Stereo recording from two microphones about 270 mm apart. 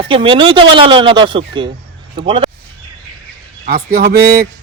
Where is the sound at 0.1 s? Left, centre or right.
Centre.